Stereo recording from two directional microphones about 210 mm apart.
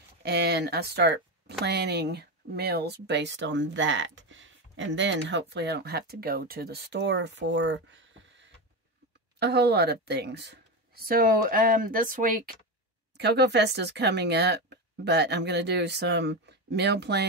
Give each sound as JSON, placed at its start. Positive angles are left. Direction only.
{"t": 0.2, "sound": "speech", "side_deg": -50}
{"t": 13.2, "sound": "speech", "side_deg": -55}